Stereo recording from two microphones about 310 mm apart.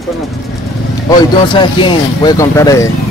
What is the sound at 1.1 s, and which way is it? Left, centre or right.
Speech, centre.